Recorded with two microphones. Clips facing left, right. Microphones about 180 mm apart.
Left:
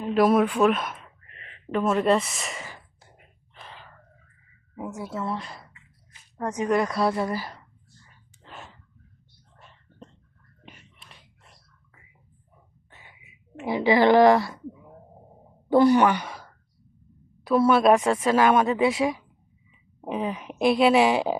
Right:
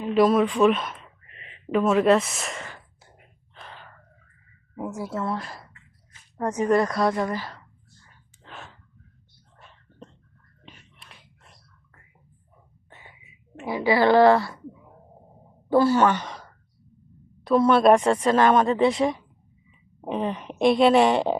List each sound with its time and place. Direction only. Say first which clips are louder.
0.3 s speech: right 1 dB; 5° left (ahead or behind)
4.7 s speech: right 3 dB; centre (ahead or behind)
8.4 s a sound: right 1 dB; 5° left (ahead or behind)
13.2 s a woman's voice: left 2 dB; 20° left (ahead or behind)
15.7 s speech: left 1 dB; 15° left (ahead or behind)